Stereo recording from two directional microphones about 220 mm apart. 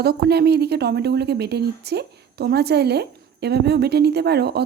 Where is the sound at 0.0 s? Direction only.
45° right (ahead or behind).